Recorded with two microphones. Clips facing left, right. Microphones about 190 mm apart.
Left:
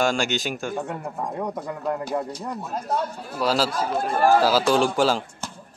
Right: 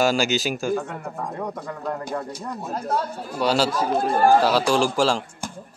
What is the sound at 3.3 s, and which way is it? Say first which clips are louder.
A man's voice: right 2 dB; centre (ahead or behind).